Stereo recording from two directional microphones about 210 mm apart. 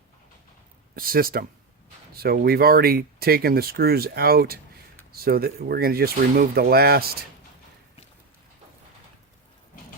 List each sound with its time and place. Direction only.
0.9 s speech: 45° right (ahead or behind)